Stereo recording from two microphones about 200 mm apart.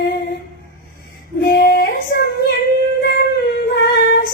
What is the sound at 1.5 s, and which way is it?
Child singing, 50° left (ahead or behind).